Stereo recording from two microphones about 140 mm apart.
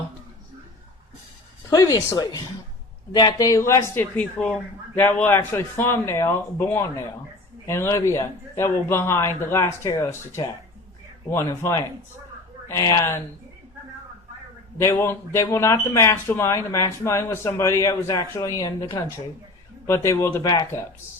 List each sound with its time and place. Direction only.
1.7 s speech: 25° left (ahead or behind)
4.2 s speech: 10° left (ahead or behind)
14.8 s speech: 20° left (ahead or behind)